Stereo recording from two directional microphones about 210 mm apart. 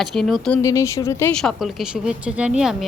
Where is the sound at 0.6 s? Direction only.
15° left (ahead or behind).